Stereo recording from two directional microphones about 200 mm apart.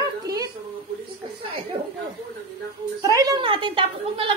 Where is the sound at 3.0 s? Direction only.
20° right (ahead or behind).